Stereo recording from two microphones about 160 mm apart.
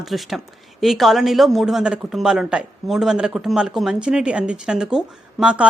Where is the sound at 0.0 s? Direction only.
Centre (ahead or behind).